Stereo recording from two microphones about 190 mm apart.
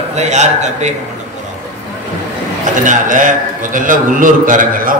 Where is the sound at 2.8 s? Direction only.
40° right (ahead or behind).